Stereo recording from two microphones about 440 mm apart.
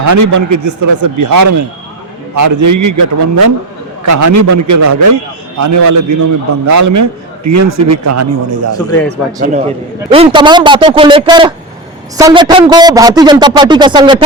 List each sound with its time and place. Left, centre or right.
0.0 s a man's voice: right
9.0 s a man's voice: centre